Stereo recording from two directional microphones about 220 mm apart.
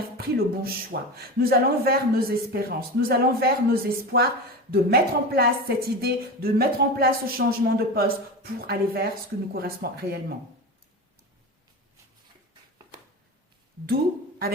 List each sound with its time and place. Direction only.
0.2 s speech: 45° right (ahead or behind)